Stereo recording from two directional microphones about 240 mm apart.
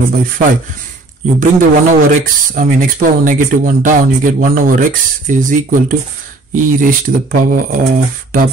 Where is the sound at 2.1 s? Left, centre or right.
Right.